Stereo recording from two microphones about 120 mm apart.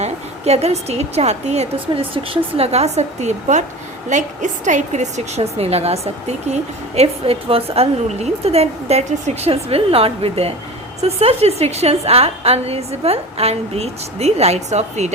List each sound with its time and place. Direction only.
0.0 s a woman's voice: 60° right (ahead or behind)
4.1 s a woman's voice: 90° right; by 15.1 s 70° right (ahead or behind)